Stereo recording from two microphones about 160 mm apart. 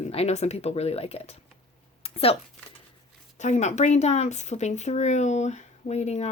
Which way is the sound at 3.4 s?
45° left (ahead or behind).